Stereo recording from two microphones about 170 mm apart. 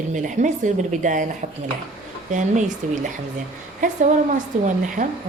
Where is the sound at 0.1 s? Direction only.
45° right (ahead or behind).